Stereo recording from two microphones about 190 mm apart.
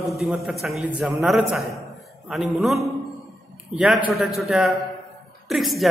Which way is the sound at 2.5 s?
Centre (ahead or behind).